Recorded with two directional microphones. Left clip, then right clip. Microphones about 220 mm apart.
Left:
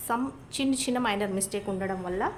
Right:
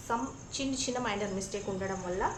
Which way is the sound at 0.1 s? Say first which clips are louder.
Left 4 dB; 50° left (ahead or behind).